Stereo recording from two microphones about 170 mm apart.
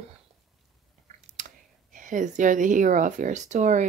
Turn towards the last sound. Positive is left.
turn(degrees=-45)  # may be behind; listen again after turning